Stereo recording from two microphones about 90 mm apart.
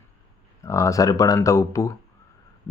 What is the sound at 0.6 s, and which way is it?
Speech, 35° left (ahead or behind).